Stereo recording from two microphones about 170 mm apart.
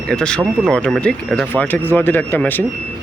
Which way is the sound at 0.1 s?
5° left (ahead or behind).